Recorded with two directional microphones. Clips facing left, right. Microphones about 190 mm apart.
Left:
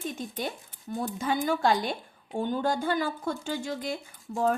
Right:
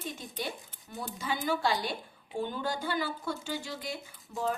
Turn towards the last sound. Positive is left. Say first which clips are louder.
# left 6 dB
turn(degrees=50)  # may be behind; listen again after turning